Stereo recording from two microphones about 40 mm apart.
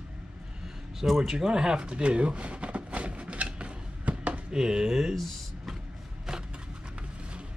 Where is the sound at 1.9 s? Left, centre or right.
Right.